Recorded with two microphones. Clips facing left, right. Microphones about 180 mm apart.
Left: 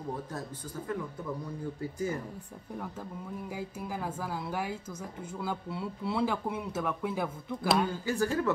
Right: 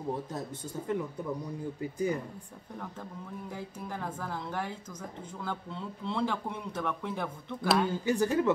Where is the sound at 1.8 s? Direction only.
15° right (ahead or behind).